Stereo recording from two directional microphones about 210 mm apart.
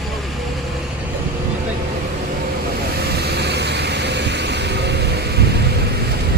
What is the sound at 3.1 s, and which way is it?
Vehicle, 50° right (ahead or behind).